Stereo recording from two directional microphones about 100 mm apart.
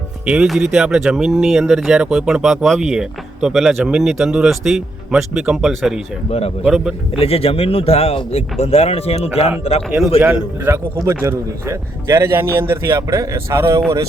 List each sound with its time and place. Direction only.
0.3 s speech: 5° right (ahead or behind)
7.2 s speech: 70° left (ahead or behind); by 9.5 s 90° left
10.2 s a man's voice: 10° right (ahead or behind)
11.0 s a man's voice: 30° right (ahead or behind)